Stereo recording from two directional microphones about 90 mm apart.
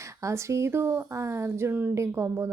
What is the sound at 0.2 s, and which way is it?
A woman's voice, 35° right (ahead or behind).